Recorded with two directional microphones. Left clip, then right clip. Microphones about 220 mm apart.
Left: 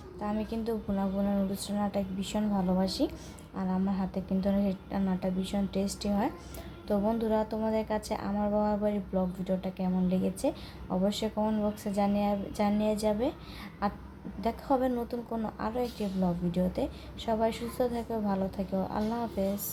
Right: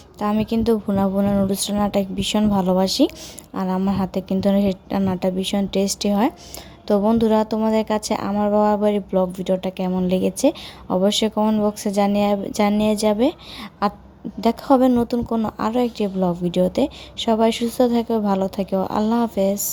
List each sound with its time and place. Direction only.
0.2 s a woman's voice: 45° right (ahead or behind)